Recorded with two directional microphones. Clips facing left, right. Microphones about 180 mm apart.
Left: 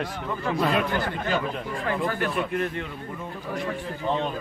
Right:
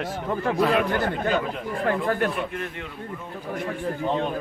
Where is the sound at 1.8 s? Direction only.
50° right (ahead or behind).